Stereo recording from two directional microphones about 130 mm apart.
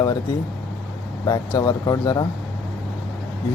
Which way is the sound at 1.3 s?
30° left (ahead or behind).